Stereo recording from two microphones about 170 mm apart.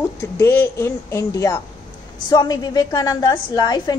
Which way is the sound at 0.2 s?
15° left (ahead or behind).